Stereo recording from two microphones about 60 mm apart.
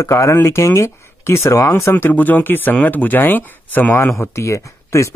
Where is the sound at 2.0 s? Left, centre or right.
Left.